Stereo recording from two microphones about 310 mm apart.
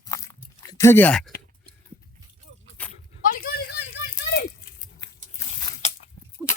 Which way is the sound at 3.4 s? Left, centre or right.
Left.